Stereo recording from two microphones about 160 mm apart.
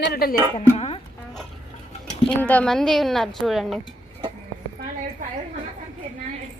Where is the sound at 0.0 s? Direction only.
75° left (ahead or behind).